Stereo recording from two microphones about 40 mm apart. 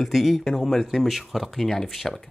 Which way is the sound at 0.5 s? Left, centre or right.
Centre.